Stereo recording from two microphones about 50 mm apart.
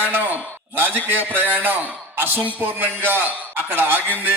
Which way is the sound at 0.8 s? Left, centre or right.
Right.